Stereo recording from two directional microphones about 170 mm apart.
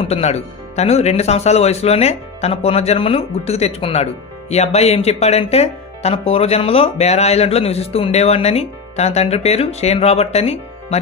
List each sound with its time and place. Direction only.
0.1 s speech: 40° left (ahead or behind)